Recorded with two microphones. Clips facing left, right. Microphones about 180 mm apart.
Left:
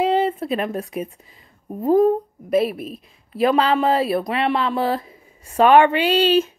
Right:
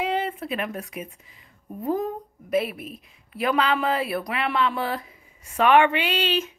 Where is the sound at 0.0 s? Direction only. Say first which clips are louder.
Left 7 dB; 30° left (ahead or behind).